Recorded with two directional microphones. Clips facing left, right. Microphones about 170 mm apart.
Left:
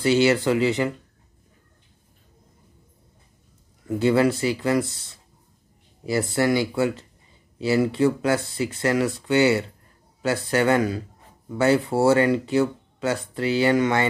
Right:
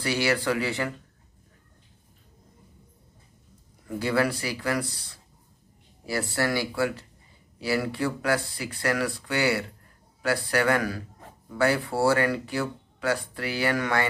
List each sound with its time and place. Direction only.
0.0 s speech: 20° left (ahead or behind)
4.0 s speech: 20° left (ahead or behind)